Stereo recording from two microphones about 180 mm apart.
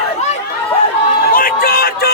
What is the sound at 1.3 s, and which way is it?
Music, 55° left (ahead or behind).